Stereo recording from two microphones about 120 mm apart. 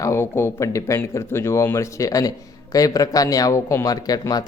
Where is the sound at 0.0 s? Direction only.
20° left (ahead or behind).